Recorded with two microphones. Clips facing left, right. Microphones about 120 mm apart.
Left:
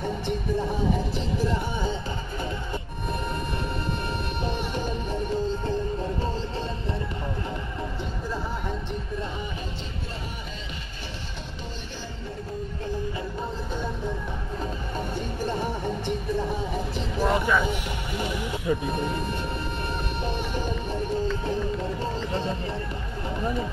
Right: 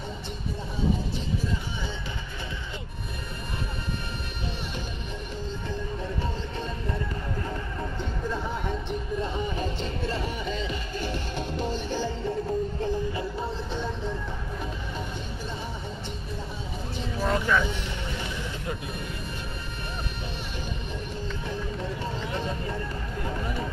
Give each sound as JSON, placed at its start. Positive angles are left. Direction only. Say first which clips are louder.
{"t": 0.0, "sound": "music", "louder": "left 7 dB", "side_deg": 60}
{"t": 15.4, "sound": "music", "louder": "left 11 dB", "side_deg": 55}
{"t": 17.2, "sound": "vehicle", "louder": "left 2 dB", "side_deg": 10}
{"t": 22.3, "sound": "a sound", "louder": "left 2 dB", "side_deg": 30}